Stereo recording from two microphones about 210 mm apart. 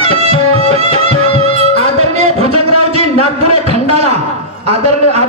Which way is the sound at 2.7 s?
90° right.